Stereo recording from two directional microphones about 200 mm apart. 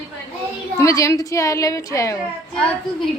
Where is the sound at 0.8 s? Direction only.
15° left (ahead or behind).